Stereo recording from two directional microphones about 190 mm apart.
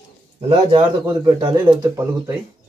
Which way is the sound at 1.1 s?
20° right (ahead or behind).